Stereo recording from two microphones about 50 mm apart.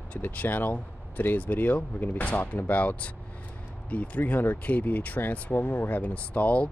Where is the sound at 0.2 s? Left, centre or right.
Left.